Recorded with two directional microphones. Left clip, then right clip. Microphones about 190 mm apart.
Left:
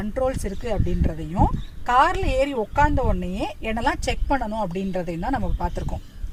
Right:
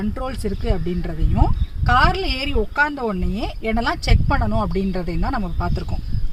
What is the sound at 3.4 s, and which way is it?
Speech, 15° left (ahead or behind).